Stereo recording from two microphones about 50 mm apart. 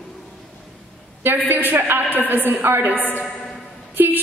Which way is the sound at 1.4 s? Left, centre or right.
Right.